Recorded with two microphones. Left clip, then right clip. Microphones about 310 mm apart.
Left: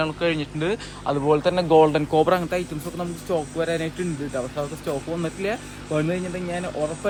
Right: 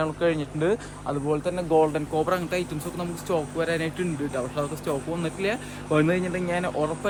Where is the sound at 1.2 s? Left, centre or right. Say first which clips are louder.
Left 7 dB; centre.